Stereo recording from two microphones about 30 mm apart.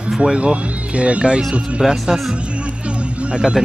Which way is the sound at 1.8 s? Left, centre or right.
Centre.